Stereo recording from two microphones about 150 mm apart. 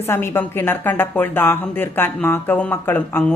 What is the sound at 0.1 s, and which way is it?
A woman's voice, 15° left (ahead or behind).